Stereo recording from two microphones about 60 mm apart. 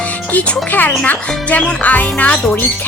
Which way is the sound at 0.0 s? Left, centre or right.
Left.